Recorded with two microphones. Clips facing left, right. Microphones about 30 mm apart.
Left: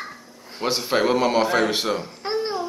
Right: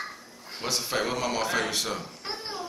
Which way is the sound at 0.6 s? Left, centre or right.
Left.